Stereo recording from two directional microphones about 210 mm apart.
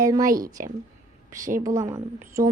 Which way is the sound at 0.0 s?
15° right (ahead or behind).